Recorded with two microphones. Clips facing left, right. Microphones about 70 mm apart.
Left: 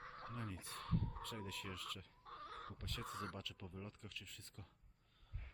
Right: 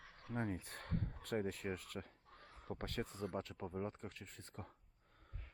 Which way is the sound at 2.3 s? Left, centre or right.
Left.